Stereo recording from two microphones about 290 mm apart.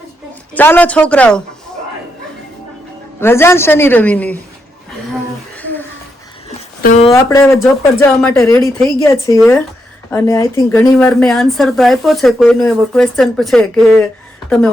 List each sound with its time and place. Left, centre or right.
0.5 s speech: centre
3.2 s speech: centre
5.5 s a sound: centre
6.8 s speech: left
7.1 s speech: centre